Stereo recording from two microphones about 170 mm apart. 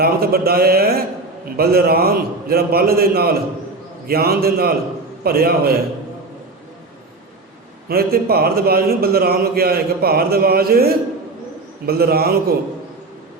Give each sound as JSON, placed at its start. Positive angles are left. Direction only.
{"t": 0.0, "sound": "a man's voice", "side_deg": -65}
{"t": 7.9, "sound": "a man's voice", "side_deg": -65}